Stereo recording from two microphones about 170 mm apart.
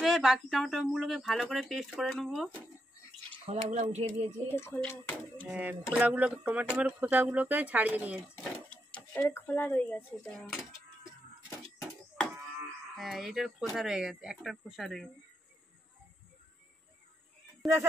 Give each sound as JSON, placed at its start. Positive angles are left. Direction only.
{"t": 0.0, "sound": "speech", "side_deg": 0}
{"t": 3.4, "sound": "speech", "side_deg": -40}
{"t": 4.5, "sound": "speech", "side_deg": 15}
{"t": 5.5, "sound": "speech", "side_deg": -10}
{"t": 8.6, "sound": "speech", "side_deg": 5}
{"t": 12.9, "sound": "speech", "side_deg": 0}
{"t": 17.6, "sound": "music", "side_deg": 0}